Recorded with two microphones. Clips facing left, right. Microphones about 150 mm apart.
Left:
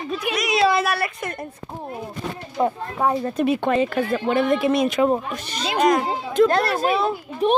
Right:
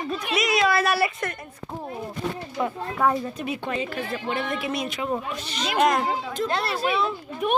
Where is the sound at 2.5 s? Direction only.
20° left (ahead or behind).